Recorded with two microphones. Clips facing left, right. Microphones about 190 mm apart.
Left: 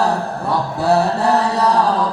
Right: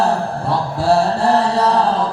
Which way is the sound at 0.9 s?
30° right (ahead or behind).